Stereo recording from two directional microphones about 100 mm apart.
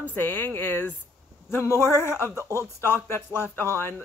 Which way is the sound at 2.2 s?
30° right (ahead or behind).